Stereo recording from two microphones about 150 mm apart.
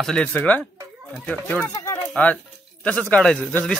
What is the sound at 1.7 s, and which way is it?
Speech, 25° left (ahead or behind).